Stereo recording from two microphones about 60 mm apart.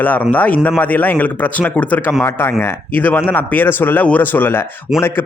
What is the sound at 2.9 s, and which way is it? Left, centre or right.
Speech, left.